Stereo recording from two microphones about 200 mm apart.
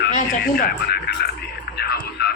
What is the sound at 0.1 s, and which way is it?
Speech, 50° left (ahead or behind).